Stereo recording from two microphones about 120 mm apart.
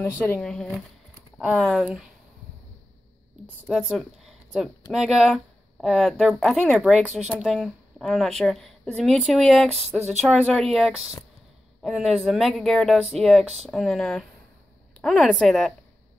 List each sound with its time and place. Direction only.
0.0 s speech: 15° left (ahead or behind)
0.4 s speech: 5° left (ahead or behind)
3.6 s speech: 5° right (ahead or behind)
9.7 s speech: 60° right (ahead or behind)
10.2 s speech: centre (ahead or behind)